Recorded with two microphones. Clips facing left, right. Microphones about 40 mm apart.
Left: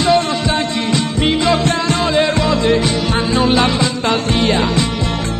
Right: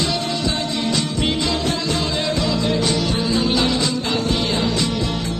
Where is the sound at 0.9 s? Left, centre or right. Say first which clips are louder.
Left 8 dB; left.